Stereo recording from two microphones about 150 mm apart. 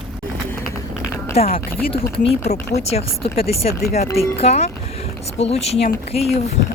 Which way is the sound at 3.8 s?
90° left.